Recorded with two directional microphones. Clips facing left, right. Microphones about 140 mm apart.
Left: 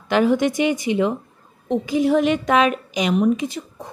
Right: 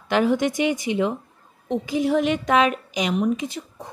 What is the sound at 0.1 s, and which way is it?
Speech, 80° left.